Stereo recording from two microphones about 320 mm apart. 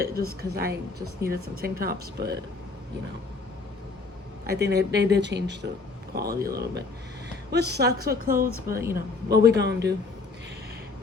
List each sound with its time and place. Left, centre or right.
0.0 s speech: right
4.4 s speech: right